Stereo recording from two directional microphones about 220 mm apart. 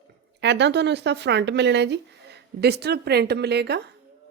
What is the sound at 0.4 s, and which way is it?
A woman's voice, 50° right (ahead or behind).